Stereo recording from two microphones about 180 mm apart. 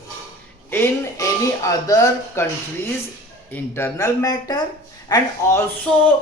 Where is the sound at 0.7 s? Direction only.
15° left (ahead or behind).